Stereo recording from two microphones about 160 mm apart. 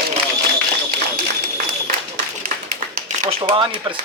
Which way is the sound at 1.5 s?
55° right (ahead or behind).